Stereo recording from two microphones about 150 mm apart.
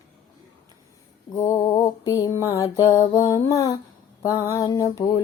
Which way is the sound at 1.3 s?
20° left (ahead or behind).